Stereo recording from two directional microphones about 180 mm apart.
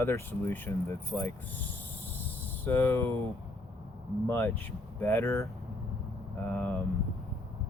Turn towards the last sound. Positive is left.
turn(degrees=10)  # may be behind; listen again after turning